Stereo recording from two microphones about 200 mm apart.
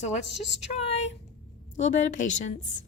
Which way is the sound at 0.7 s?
30° left (ahead or behind).